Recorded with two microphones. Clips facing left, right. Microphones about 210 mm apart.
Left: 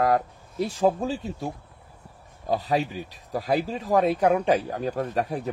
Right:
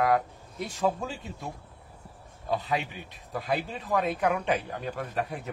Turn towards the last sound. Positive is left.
turn(degrees=35)  # may be behind; listen again after turning